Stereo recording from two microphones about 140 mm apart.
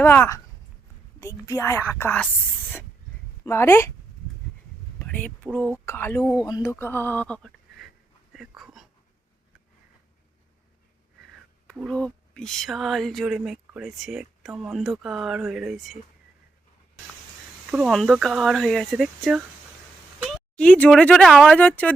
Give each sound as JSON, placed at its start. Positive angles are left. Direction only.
{"t": 0.0, "sound": "a woman's voice", "side_deg": 15}
{"t": 3.4, "sound": "a woman's voice", "side_deg": 20}
{"t": 5.0, "sound": "speech", "side_deg": 10}
{"t": 6.4, "sound": "speech", "side_deg": 25}
{"t": 8.3, "sound": "a sound", "side_deg": 0}
{"t": 11.7, "sound": "speech", "side_deg": 5}
{"t": 17.7, "sound": "speech", "side_deg": -5}
{"t": 20.6, "sound": "speech", "side_deg": 10}